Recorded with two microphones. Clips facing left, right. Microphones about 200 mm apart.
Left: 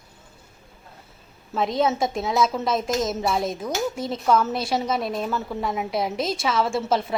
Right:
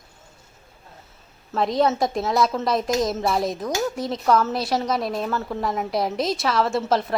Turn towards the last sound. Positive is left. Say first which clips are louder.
# right 1 dB
turn(degrees=0)  # may be behind; listen again after turning